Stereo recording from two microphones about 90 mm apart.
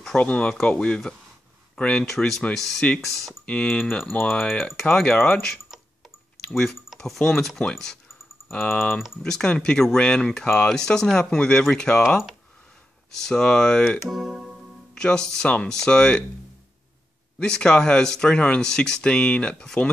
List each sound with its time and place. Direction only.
0.0 s speech: 10° left (ahead or behind)
5.7 s a sound: centre (ahead or behind)
6.5 s speech: centre (ahead or behind)
8.9 s speech: 5° right (ahead or behind)
9.2 s speech: 10° left (ahead or behind)
14.0 s music: 5° right (ahead or behind)
15.0 s speech: 5° left (ahead or behind)
17.4 s speech: 10° left (ahead or behind)